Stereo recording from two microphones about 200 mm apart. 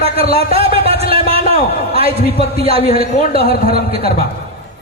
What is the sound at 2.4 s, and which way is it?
Speech, 30° right (ahead or behind).